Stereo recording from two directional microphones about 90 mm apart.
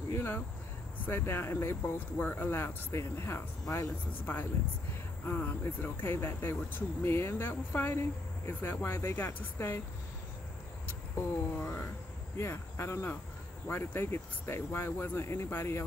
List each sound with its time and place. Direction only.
0.1 s speech: 25° left (ahead or behind)
3.6 s speech: 40° left (ahead or behind)
4.2 s speech: 20° left (ahead or behind)
11.5 s speech: 25° left (ahead or behind)